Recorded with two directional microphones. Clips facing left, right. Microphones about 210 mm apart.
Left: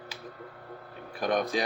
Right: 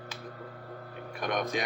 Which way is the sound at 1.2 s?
35° left (ahead or behind).